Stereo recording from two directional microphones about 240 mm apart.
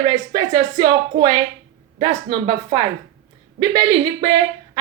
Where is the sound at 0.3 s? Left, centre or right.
Centre.